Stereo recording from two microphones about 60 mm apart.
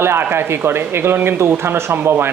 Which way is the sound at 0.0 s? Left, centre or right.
Right.